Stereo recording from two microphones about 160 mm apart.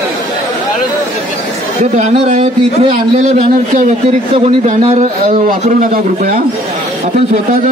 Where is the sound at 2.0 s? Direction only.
45° right (ahead or behind).